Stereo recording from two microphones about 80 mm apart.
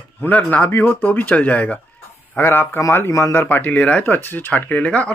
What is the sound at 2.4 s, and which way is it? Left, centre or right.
Speech, left.